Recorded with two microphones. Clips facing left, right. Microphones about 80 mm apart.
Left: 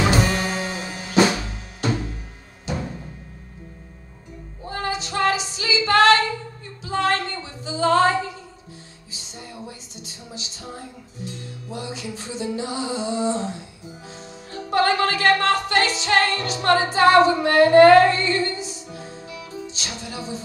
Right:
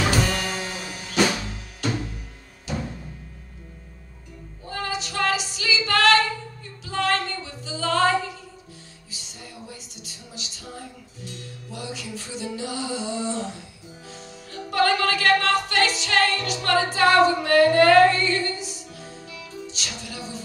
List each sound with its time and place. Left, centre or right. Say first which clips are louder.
0.0 s music: left 3 dB; left
4.6 s female singing: left 3 dB; left
6.8 s music: left 2 dB; left
9.7 s a sound: left 2 dB; left
11.7 s music: left 3 dB; left